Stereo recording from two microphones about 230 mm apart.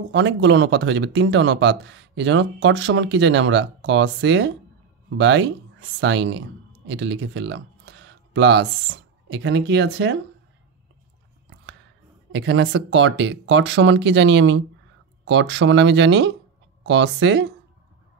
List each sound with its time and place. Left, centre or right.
0.1 s speech: right
12.3 s speech: right